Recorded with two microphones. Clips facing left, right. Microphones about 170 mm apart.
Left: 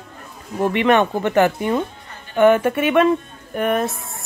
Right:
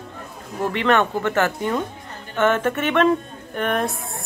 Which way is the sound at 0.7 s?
15° left (ahead or behind).